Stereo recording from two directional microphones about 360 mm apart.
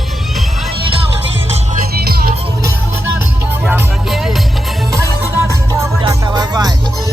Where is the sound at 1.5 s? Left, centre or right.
Centre.